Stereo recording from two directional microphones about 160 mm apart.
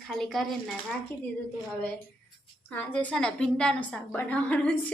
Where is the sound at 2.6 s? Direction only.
10° left (ahead or behind).